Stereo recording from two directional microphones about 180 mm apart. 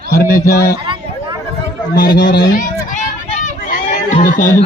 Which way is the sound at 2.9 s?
45° left (ahead or behind).